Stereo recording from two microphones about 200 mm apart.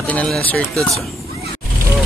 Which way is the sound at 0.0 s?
5° left (ahead or behind).